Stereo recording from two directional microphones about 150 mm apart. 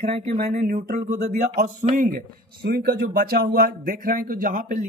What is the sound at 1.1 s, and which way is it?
A man's voice, 80° right.